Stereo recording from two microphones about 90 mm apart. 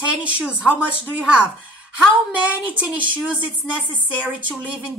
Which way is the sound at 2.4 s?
15° right (ahead or behind).